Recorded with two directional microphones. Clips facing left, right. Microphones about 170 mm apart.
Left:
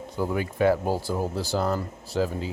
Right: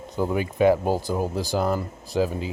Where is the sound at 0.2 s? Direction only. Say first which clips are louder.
Right 3 dB; 20° right (ahead or behind).